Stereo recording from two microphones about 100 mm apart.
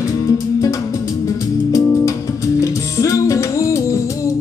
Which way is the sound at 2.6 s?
30° left (ahead or behind).